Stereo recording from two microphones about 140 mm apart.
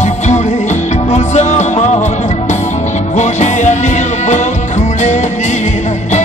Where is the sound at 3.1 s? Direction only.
55° left (ahead or behind).